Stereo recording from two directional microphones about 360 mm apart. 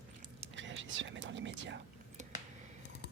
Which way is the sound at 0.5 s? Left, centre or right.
Right.